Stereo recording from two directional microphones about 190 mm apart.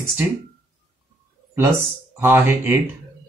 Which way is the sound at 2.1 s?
10° right (ahead or behind).